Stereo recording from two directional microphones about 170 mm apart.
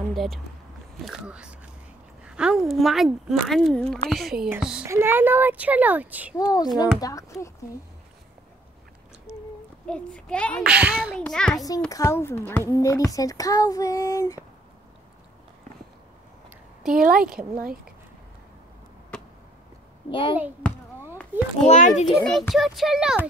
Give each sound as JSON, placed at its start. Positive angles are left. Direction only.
{"t": 0.1, "sound": "speech", "side_deg": 0}
{"t": 6.3, "sound": "a child's voice", "side_deg": 20}
{"t": 9.8, "sound": "speech", "side_deg": 5}
{"t": 10.7, "sound": "speech", "side_deg": -5}
{"t": 11.1, "sound": "speech", "side_deg": 5}
{"t": 11.9, "sound": "a child's voice", "side_deg": 15}
{"t": 16.9, "sound": "speech", "side_deg": -55}
{"t": 19.1, "sound": "a sound", "side_deg": 5}
{"t": 20.1, "sound": "a child's voice", "side_deg": 30}
{"t": 21.3, "sound": "a child's voice", "side_deg": -10}
{"t": 21.6, "sound": "a child's voice", "side_deg": 45}
{"t": 22.0, "sound": "speech", "side_deg": 0}